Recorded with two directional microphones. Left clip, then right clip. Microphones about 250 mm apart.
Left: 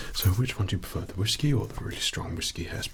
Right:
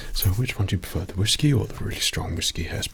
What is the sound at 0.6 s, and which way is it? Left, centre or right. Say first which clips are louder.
Speech: right 4 dB; right.